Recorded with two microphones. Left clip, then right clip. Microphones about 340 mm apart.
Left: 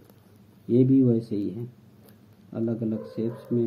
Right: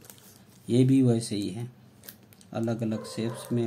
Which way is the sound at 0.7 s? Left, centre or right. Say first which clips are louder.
Left 3 dB; centre.